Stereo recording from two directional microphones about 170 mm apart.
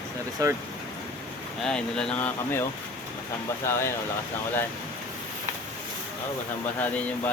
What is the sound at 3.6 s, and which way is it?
Speech, 15° left (ahead or behind).